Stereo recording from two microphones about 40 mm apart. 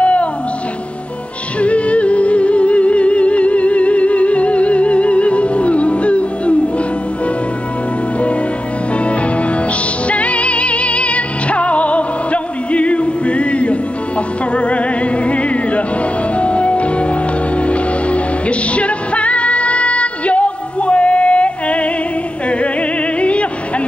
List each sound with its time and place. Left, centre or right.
0.0 s music: left
1.6 s music: left
10.0 s music: left